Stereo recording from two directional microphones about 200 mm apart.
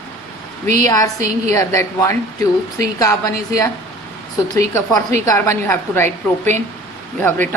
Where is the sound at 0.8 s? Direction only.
15° left (ahead or behind).